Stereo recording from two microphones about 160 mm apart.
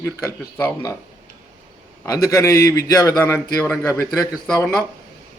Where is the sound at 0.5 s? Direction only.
15° left (ahead or behind).